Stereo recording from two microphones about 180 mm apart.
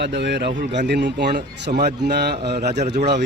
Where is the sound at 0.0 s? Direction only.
75° right (ahead or behind).